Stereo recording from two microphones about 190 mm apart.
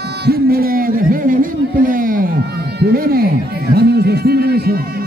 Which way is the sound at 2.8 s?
50° right (ahead or behind).